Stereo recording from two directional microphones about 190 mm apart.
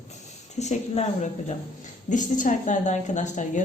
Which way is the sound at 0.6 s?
35° left (ahead or behind).